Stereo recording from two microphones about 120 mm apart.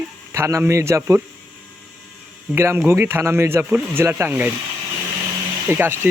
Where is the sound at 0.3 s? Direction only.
25° right (ahead or behind).